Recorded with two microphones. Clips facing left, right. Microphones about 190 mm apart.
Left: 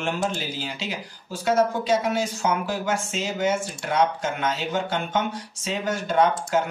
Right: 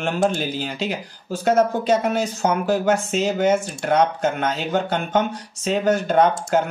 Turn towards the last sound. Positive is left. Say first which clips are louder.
# right 3 dB
turn(degrees=-55)  # may be behind; listen again after turning